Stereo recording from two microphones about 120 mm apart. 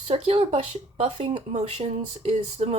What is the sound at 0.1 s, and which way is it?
Speech, 50° right (ahead or behind).